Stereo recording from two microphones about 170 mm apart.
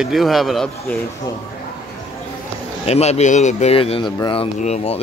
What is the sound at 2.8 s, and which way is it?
A man's voice, 40° left (ahead or behind).